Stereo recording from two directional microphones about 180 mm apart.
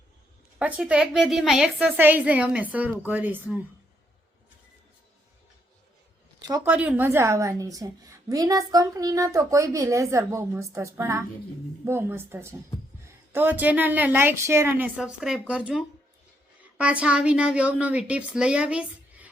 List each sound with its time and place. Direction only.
0.6 s a woman's voice: 5° right (ahead or behind)
6.5 s a woman's voice: 10° right (ahead or behind)